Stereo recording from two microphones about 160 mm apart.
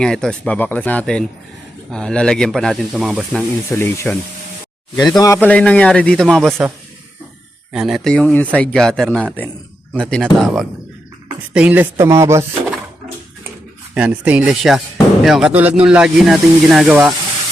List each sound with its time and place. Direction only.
0.0 s a man's voice: 5° left (ahead or behind)
3.7 s a man's voice: 15° left (ahead or behind)
5.5 s a man's voice: 10° left (ahead or behind); by 12.7 s 15° right (ahead or behind)
13.9 s speech: 5° right (ahead or behind)